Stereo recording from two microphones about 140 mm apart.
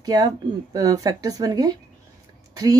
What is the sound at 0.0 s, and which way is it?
Speech, 25° right (ahead or behind).